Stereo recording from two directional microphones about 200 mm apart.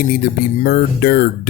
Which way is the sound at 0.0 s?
45° left (ahead or behind).